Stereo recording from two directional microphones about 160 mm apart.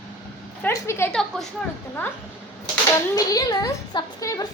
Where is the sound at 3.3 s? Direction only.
20° left (ahead or behind).